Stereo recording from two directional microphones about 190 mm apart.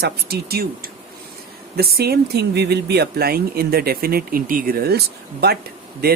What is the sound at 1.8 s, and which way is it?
Speech, 55° right (ahead or behind).